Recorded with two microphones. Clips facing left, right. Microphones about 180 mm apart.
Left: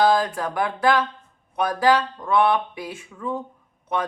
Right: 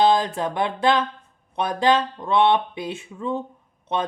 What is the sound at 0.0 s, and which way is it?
Speech, 25° right (ahead or behind).